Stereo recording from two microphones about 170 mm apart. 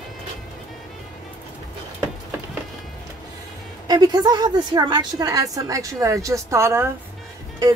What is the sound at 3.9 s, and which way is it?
A woman's voice, 25° right (ahead or behind).